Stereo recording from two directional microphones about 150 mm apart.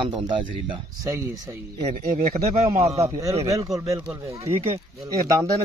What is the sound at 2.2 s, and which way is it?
Speech, 45° right (ahead or behind).